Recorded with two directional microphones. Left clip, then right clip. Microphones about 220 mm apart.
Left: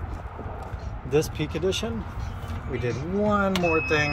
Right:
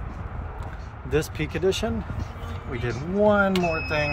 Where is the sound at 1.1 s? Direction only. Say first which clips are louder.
Left 1 dB; 15° right (ahead or behind).